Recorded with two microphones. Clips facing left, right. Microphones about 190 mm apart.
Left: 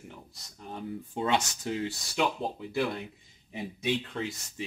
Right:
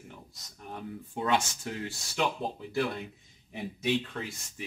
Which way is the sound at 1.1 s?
25° left (ahead or behind).